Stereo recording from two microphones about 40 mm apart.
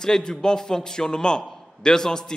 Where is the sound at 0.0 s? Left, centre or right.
Centre.